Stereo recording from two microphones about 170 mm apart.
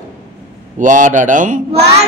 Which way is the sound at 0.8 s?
50° right (ahead or behind).